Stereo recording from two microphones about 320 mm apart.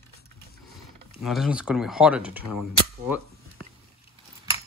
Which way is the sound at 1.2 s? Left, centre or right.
Centre.